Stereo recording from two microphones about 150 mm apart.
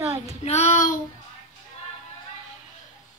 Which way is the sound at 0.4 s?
50° left (ahead or behind).